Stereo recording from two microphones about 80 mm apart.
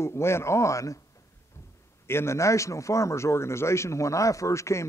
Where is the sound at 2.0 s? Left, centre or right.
Left.